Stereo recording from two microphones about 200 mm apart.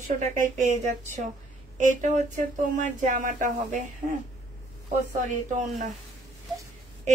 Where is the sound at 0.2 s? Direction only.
35° right (ahead or behind).